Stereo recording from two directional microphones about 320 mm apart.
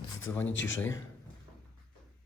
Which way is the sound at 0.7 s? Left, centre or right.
Centre.